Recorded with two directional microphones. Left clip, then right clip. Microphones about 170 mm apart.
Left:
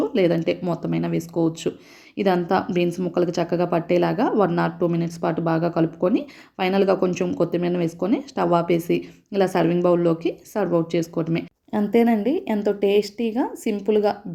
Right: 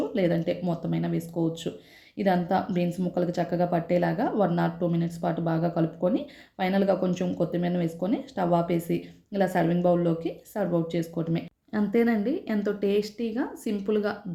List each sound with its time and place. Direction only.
0.0 s a woman's voice: 15° left (ahead or behind)